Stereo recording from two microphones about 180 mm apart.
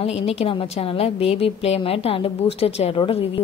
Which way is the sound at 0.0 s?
35° left (ahead or behind).